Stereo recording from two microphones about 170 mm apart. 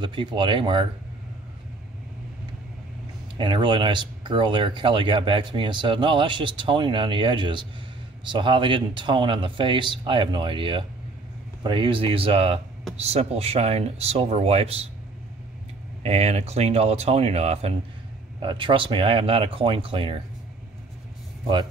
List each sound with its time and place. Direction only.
0.0 s speech: 30° right (ahead or behind)
3.3 s speech: 30° right (ahead or behind)
16.0 s speech: 40° right (ahead or behind)